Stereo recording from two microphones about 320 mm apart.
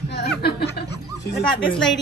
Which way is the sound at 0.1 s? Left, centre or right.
Left.